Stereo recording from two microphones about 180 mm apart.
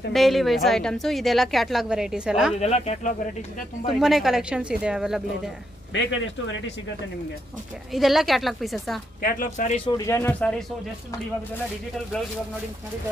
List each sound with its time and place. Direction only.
0.1 s a woman's voice: centre (ahead or behind)
2.6 s speech: 35° left (ahead or behind)
4.0 s a woman's voice: centre (ahead or behind)
5.9 s speech: 90° left
7.9 s a woman's voice: centre (ahead or behind)
9.2 s speech: 45° left (ahead or behind)
9.9 s speech: 15° left (ahead or behind)